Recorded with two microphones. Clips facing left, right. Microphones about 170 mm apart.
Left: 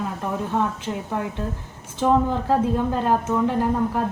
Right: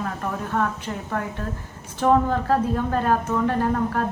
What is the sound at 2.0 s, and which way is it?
A woman's voice, 15° left (ahead or behind).